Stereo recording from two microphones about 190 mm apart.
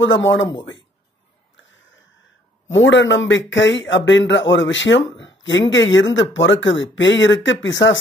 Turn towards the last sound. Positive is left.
turn(degrees=75)  # may be behind; listen again after turning